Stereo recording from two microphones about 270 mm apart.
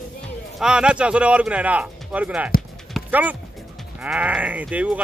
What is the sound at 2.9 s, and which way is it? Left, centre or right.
Clip-clop, centre.